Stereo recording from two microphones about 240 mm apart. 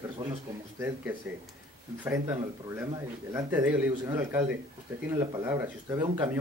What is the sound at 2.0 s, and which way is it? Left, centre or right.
Speech, centre.